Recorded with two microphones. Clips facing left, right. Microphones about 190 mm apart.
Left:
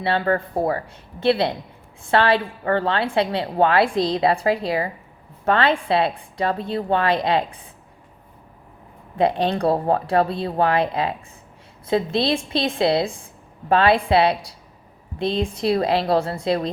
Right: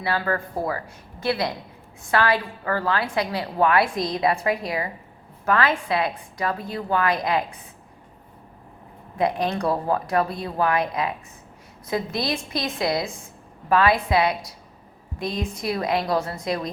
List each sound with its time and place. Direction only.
0.0 s a woman's voice: 30° left (ahead or behind)
9.1 s a woman's voice: 30° left (ahead or behind)